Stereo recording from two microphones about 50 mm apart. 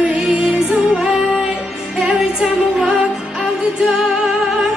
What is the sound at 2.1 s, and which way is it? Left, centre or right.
Music, centre.